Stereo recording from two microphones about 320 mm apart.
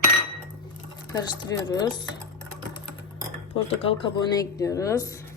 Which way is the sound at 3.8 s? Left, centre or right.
Centre.